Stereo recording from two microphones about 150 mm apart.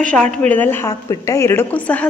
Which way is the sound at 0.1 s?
5° left (ahead or behind).